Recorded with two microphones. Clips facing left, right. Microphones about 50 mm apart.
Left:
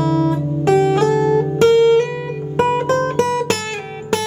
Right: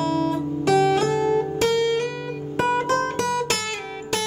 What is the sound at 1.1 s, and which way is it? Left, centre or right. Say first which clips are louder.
Guitar: left 5 dB; centre.